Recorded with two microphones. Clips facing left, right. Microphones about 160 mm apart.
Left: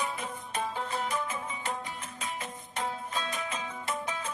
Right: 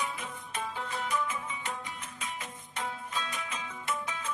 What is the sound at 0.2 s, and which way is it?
Music, 35° left (ahead or behind).